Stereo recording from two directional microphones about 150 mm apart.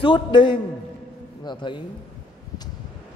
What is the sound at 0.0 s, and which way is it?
A man's voice, 30° left (ahead or behind).